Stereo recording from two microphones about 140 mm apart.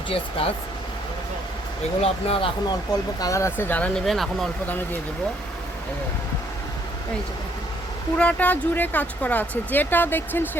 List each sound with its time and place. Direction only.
0.1 s speech: 40° left (ahead or behind)
2.0 s speech: 45° left (ahead or behind)
2.6 s speech: 30° left (ahead or behind); by 4.0 s 10° left (ahead or behind)
4.0 s speech: centre (ahead or behind)
8.2 s speech: 10° left (ahead or behind)